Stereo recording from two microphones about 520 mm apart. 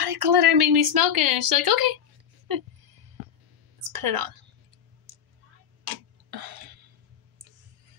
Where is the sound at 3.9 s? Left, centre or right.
Right.